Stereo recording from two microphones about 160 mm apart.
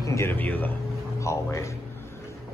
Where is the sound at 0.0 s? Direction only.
15° left (ahead or behind).